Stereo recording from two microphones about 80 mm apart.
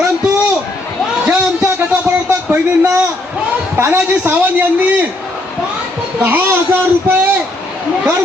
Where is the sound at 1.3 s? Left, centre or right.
Right.